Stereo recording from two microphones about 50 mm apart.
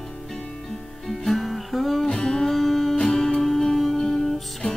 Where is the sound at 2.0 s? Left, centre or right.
Centre.